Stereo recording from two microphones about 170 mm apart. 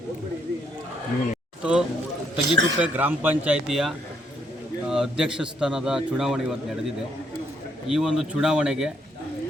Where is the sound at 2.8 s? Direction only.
10° right (ahead or behind).